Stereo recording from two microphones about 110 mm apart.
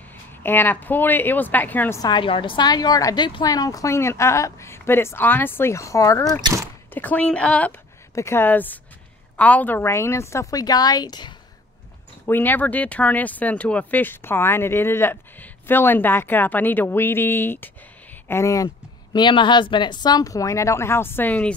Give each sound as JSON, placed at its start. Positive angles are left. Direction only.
{"t": 0.4, "sound": "speech", "side_deg": 20}
{"t": 2.0, "sound": "speech", "side_deg": 40}
{"t": 2.2, "sound": "a woman's voice", "side_deg": 50}
{"t": 6.9, "sound": "speech", "side_deg": 15}
{"t": 8.1, "sound": "a woman's voice", "side_deg": 25}
{"t": 12.3, "sound": "a woman's voice", "side_deg": 15}
{"t": 19.1, "sound": "speech", "side_deg": 45}